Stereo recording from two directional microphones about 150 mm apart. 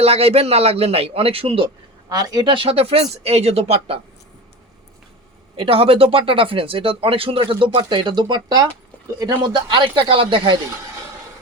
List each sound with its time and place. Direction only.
0.0 s speech: 40° right (ahead or behind)
2.0 s speech: 25° right (ahead or behind)
5.5 s speech: 40° right (ahead or behind)